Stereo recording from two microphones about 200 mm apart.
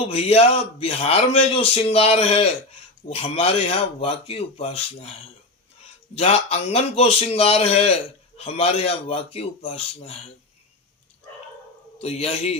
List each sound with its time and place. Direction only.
0.1 s a man's voice: 30° left (ahead or behind)
6.1 s a man's voice: 30° left (ahead or behind)
12.0 s a man's voice: 30° left (ahead or behind)